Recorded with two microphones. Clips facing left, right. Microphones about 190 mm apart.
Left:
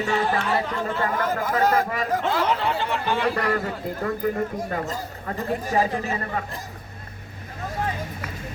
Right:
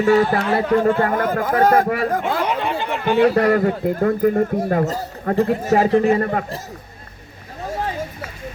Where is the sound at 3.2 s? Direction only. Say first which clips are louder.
Right 9 dB; 50° right (ahead or behind).